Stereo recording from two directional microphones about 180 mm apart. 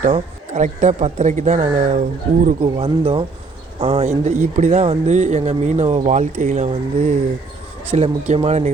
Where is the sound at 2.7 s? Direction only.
30° right (ahead or behind).